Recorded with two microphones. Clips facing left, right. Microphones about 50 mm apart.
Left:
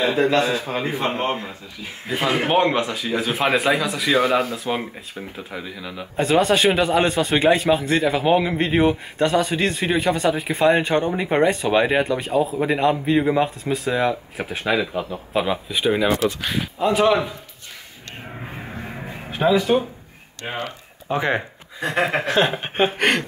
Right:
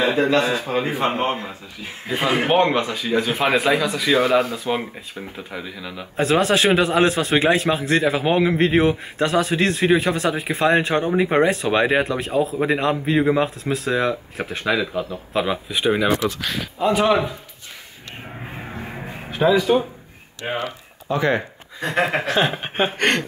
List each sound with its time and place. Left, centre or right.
0.4 s a man's voice: centre
16.3 s speech: centre
16.7 s speech: centre
18.4 s a sound: centre
19.3 s speech: centre
20.4 s a man's voice: centre
21.1 s speech: left
21.4 s speech: centre